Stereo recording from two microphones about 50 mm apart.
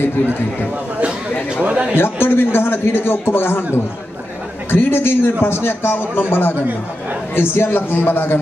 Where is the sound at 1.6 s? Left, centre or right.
Right.